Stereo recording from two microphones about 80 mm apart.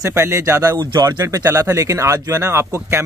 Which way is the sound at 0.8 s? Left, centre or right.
Right.